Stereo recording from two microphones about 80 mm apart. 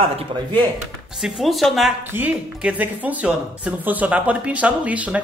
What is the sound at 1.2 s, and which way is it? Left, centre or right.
Speech, centre.